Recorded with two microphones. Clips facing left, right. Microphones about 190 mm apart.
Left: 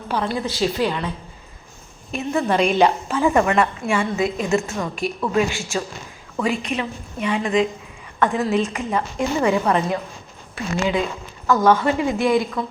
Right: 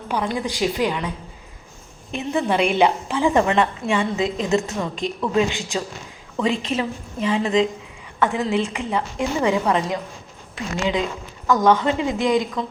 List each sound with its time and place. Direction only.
0.1 s a woman's voice: 15° right (ahead or behind)
2.1 s a woman's voice: 15° right (ahead or behind)
8.4 s a woman's voice: 10° right (ahead or behind)